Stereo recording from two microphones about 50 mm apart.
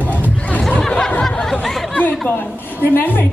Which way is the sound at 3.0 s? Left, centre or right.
Left.